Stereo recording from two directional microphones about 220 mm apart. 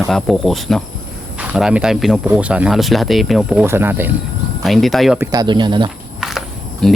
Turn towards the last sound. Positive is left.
turn(degrees=0)  # may be behind; listen again after turning